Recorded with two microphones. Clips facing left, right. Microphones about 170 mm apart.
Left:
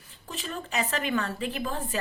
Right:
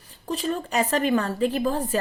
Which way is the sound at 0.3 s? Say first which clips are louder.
Right 9 dB; 45° right (ahead or behind).